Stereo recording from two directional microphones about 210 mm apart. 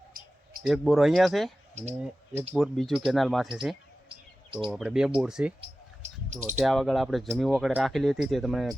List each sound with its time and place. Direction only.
0.6 s speech: centre (ahead or behind)
1.7 s speech: 30° right (ahead or behind)
2.5 s speech: centre (ahead or behind)
4.1 s chirp: 25° right (ahead or behind)
4.7 s speech: centre (ahead or behind)
5.5 s basketball bounce: 35° right (ahead or behind)
6.6 s speech: centre (ahead or behind)